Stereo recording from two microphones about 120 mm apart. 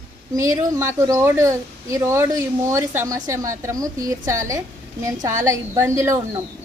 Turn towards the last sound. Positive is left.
turn(degrees=-25)  # may be behind; listen again after turning